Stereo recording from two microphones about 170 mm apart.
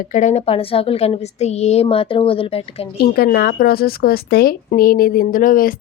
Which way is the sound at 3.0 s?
60° left (ahead or behind).